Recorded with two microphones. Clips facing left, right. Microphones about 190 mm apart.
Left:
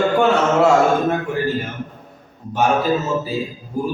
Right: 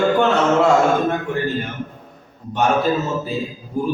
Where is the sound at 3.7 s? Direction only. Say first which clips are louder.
Right 1 dB; 10° left (ahead or behind).